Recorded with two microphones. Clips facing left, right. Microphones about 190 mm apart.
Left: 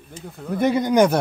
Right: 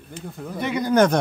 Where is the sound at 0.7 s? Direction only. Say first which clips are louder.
Right 1 dB; 15° left (ahead or behind).